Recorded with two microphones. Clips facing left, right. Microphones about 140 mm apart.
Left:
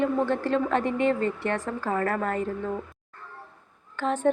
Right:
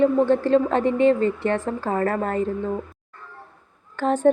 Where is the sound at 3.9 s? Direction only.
35° right (ahead or behind).